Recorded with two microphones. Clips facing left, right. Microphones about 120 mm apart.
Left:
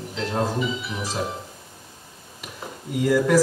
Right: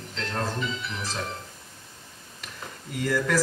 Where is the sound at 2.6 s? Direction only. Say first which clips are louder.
Left 6 dB; 10° left (ahead or behind).